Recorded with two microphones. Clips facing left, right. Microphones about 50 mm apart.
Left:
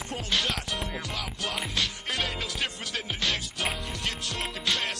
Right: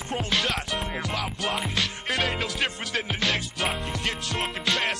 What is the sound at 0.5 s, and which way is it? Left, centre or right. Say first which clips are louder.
Music: right 3 dB; right.